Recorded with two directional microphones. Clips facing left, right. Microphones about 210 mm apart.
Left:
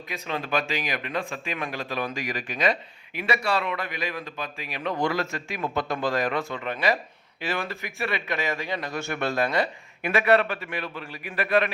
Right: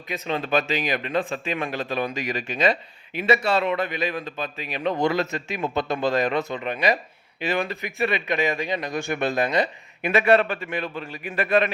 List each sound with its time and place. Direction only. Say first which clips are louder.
0.1 s speech: right 4 dB; 25° right (ahead or behind)